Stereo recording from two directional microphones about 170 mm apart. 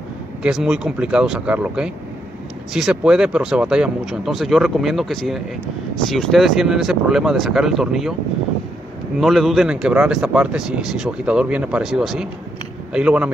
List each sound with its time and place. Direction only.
0.4 s speech: 5° right (ahead or behind)
9.2 s a man's voice: centre (ahead or behind)